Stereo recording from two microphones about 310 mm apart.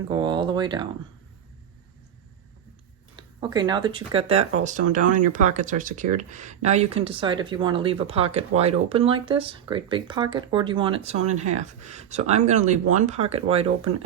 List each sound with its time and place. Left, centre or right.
0.1 s speech: centre
3.4 s speech: centre